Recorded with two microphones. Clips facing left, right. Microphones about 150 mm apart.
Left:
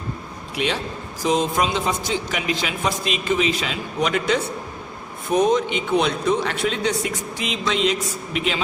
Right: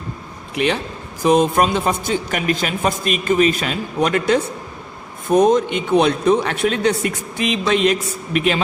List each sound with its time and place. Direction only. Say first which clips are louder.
0.5 s a man's voice: right 5 dB; 60° right (ahead or behind)